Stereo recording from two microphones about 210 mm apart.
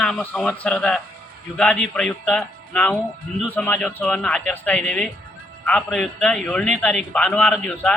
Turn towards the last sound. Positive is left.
turn(degrees=0)  # may be behind; listen again after turning